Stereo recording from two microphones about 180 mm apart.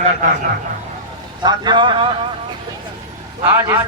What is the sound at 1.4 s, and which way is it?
Speech, 25° right (ahead or behind).